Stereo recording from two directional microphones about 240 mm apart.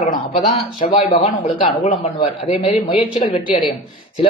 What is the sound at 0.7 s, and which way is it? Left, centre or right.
A man's voice, left.